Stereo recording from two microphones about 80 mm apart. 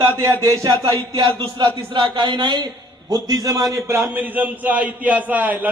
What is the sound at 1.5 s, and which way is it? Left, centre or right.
Speech, right.